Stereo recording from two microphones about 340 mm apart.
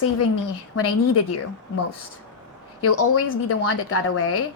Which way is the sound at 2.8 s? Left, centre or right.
Left.